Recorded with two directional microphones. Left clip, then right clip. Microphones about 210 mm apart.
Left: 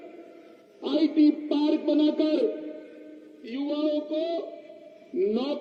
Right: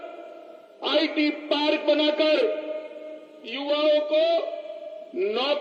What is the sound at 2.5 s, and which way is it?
Music, 20° left (ahead or behind).